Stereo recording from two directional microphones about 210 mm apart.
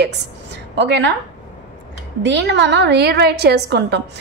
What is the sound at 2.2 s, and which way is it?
A woman's voice, 55° right (ahead or behind).